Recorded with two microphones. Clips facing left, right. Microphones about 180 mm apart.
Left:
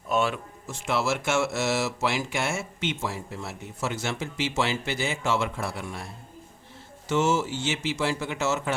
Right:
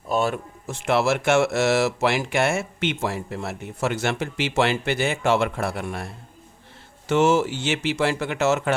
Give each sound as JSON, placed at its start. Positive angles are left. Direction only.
{"t": 0.1, "sound": "speech", "side_deg": -40}
{"t": 0.7, "sound": "speech", "side_deg": -60}
{"t": 7.1, "sound": "speech", "side_deg": -60}